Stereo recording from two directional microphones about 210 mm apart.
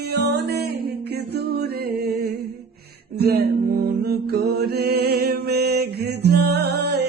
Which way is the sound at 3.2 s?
50° right (ahead or behind).